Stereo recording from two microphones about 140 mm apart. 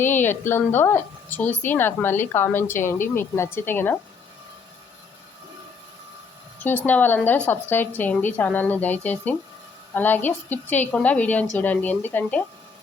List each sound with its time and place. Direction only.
0.0 s a woman's voice: 15° left (ahead or behind)
6.8 s a woman's voice: 15° left (ahead or behind)